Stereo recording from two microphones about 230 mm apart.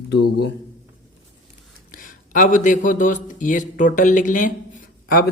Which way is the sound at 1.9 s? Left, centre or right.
Left.